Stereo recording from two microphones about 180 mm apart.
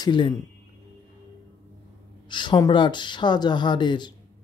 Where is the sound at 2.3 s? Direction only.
25° left (ahead or behind).